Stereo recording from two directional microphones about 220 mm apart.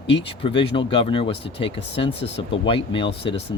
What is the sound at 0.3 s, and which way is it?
Speech, 25° left (ahead or behind).